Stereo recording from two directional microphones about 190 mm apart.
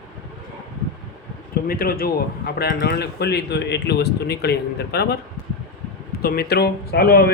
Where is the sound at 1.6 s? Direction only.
50° left (ahead or behind).